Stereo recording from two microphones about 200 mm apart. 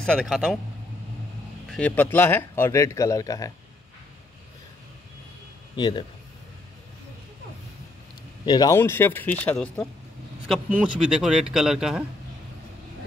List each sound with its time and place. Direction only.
0.0 s speech: centre (ahead or behind)
1.7 s speech: 5° left (ahead or behind)
5.8 s speech: 25° left (ahead or behind)
8.5 s speech: 20° left (ahead or behind)
10.5 s speech: 5° right (ahead or behind)